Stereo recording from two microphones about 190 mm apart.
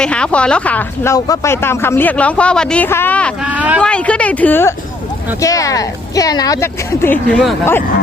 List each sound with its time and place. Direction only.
0.0 s speech: 5° left (ahead or behind)
3.4 s speech: 5° right (ahead or behind)
3.8 s speech: 5° left (ahead or behind)